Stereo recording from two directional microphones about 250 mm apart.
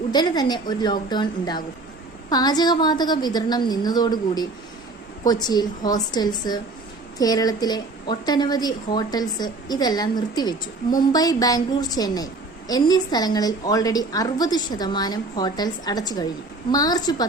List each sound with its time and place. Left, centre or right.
0.1 s a woman's voice: centre